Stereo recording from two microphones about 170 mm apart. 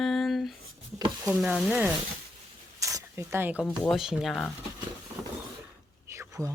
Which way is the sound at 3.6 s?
Centre (ahead or behind).